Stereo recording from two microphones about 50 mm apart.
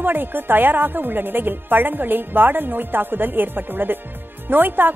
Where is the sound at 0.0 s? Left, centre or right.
Right.